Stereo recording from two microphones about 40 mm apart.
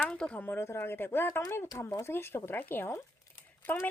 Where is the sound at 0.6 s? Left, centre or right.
Left.